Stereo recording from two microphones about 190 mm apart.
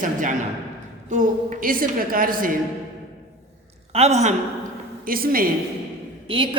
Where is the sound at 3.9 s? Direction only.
35° right (ahead or behind).